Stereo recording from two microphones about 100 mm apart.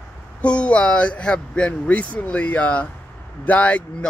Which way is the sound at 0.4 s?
10° left (ahead or behind).